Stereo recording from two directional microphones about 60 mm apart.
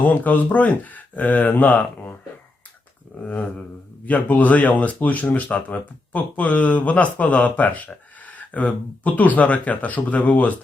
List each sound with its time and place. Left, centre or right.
0.0 s speech: left
3.2 s speech: left